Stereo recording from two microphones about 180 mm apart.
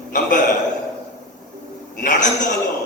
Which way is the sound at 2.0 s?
45° left (ahead or behind).